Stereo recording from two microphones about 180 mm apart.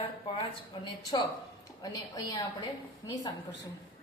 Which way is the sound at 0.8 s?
25° left (ahead or behind).